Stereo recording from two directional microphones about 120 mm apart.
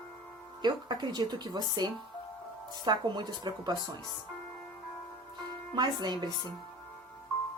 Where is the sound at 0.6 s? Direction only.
40° right (ahead or behind).